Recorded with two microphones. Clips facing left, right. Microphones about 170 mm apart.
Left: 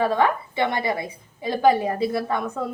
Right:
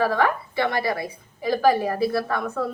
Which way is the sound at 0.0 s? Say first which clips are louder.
Left 1 dB; 20° left (ahead or behind).